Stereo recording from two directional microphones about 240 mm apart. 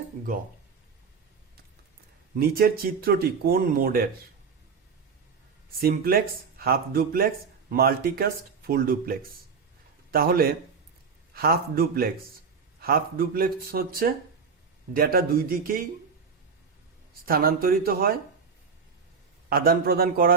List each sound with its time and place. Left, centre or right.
2.3 s speech: right
5.8 s a man's voice: right
17.2 s speech: right
19.5 s speech: right